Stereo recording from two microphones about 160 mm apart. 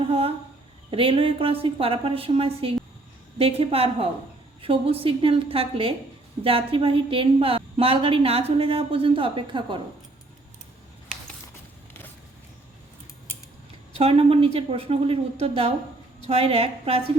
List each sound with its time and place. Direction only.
0.1 s a sound: 35° right (ahead or behind)
0.9 s a woman's voice: 35° right (ahead or behind)
13.9 s a woman's voice: 35° right (ahead or behind)